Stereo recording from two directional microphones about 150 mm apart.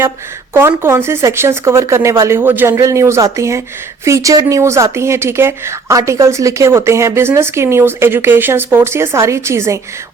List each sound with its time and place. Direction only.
0.5 s speech: 15° right (ahead or behind)